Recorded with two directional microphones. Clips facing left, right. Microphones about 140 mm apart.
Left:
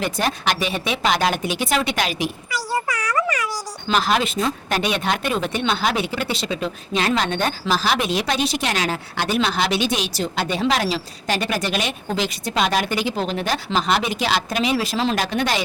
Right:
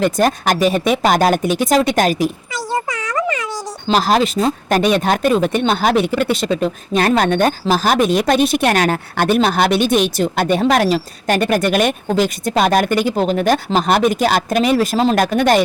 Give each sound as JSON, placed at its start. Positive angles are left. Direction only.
{"t": 0.0, "sound": "speech", "side_deg": -45}
{"t": 2.5, "sound": "a sound", "side_deg": -20}
{"t": 3.9, "sound": "speech", "side_deg": -35}